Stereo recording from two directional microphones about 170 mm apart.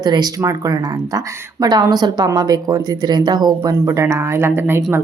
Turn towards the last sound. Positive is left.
turn(degrees=-15)  # may be behind; listen again after turning